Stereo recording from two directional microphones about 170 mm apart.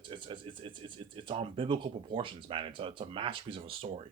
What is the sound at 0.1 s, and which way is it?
Speech, 30° right (ahead or behind).